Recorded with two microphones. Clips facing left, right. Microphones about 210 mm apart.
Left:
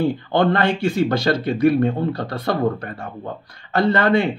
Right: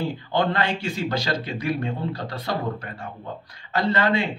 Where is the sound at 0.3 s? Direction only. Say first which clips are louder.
Left 4 dB; 55° left (ahead or behind).